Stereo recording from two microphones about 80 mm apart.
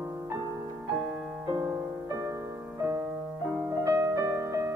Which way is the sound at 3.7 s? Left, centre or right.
Right.